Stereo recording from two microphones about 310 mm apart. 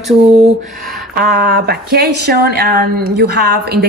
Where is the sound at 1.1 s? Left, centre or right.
Right.